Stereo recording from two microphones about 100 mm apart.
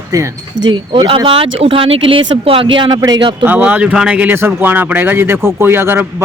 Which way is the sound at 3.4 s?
15° right (ahead or behind).